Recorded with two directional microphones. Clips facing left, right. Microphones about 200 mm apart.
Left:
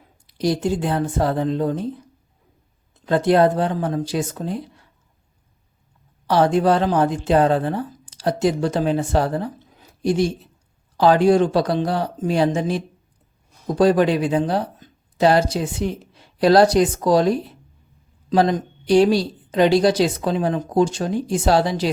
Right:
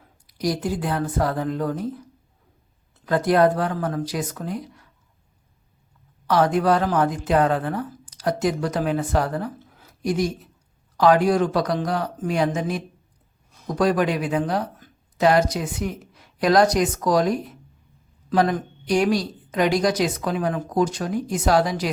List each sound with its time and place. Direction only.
0.0 s speech: 25° left (ahead or behind)
3.1 s speech: 25° left (ahead or behind)
6.2 s speech: 30° left (ahead or behind)
7.9 s a sound: 20° left (ahead or behind)
8.2 s speech: 30° left (ahead or behind)